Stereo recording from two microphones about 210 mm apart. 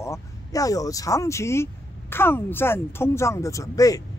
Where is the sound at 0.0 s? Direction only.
15° left (ahead or behind).